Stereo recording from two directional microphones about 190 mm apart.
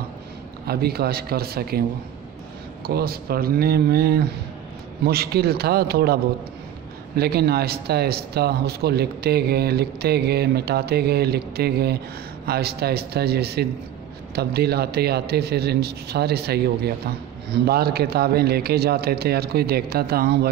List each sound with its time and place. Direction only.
0.7 s speech: 55° right (ahead or behind)
2.9 s speech: 55° right (ahead or behind)
7.2 s speech: 55° right (ahead or behind)